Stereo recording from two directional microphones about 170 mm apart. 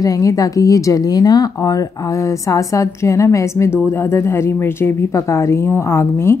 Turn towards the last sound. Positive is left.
turn(degrees=15)  # may be behind; listen again after turning